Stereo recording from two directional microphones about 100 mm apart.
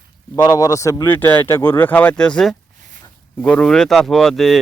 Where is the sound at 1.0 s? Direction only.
20° left (ahead or behind).